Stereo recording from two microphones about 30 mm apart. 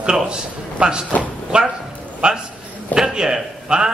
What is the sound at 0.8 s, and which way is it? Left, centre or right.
A man's voice, right.